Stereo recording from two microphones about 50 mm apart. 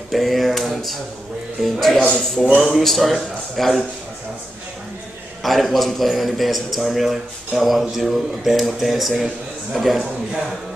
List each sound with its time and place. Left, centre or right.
0.1 s a sound: centre
1.6 s a man's voice: centre
5.4 s a man's voice: centre